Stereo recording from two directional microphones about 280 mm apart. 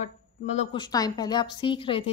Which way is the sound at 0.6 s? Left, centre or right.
Centre.